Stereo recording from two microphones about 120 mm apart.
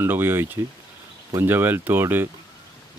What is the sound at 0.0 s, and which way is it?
Speech, 20° right (ahead or behind).